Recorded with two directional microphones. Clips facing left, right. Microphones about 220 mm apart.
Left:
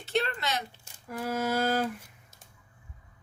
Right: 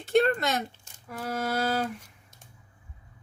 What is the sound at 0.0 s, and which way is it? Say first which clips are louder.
Speech: right 7 dB; 50° right (ahead or behind).